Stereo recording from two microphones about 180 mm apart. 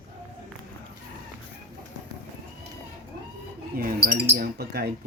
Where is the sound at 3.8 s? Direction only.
55° right (ahead or behind).